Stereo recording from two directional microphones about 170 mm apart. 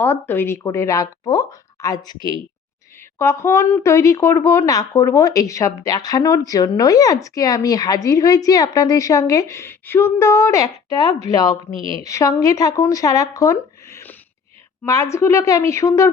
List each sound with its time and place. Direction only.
0.0 s speech: 10° left (ahead or behind)
3.2 s speech: 15° left (ahead or behind)